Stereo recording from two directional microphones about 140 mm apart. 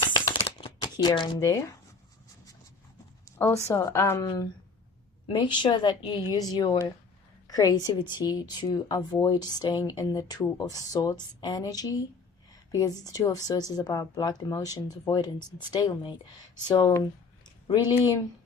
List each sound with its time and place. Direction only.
0.0 s a sound: 30° left (ahead or behind)
0.9 s speech: 30° left (ahead or behind)
3.2 s speech: 20° left (ahead or behind)
5.2 s a woman's voice: 35° left (ahead or behind)
7.4 s a sound: 25° left (ahead or behind)
7.9 s a woman's voice: 30° left (ahead or behind)